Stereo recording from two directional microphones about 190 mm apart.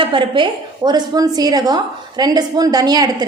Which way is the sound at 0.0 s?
25° right (ahead or behind).